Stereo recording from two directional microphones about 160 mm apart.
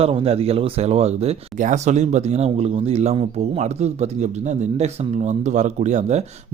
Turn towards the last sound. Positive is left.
turn(degrees=-45)  # may be behind; listen again after turning